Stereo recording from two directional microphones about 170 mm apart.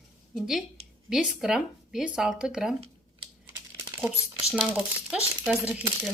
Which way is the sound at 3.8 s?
15° right (ahead or behind).